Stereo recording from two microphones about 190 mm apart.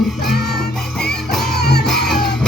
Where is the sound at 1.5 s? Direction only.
60° left (ahead or behind).